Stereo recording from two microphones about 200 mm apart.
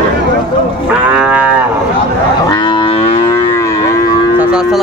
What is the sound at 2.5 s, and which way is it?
Moo, 20° left (ahead or behind).